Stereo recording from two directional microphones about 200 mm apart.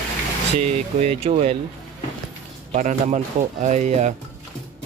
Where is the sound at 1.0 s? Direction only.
30° right (ahead or behind).